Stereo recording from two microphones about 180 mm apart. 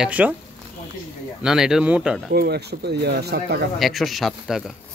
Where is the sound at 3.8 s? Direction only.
Centre (ahead or behind).